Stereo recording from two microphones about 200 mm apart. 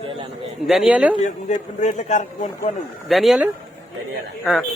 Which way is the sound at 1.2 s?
35° left (ahead or behind).